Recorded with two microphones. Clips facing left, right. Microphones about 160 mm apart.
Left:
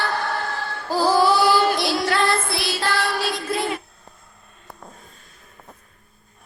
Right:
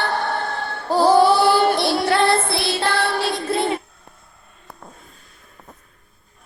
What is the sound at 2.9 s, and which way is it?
Music, 60° right (ahead or behind).